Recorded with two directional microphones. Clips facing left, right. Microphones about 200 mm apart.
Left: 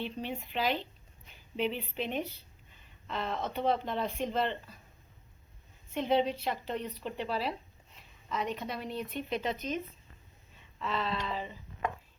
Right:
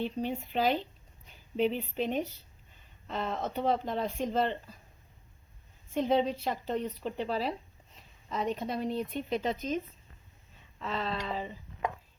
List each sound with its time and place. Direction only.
0.0 s a woman's voice: 40° right (ahead or behind)
5.9 s speech: 40° right (ahead or behind)
10.8 s speech: 40° right (ahead or behind)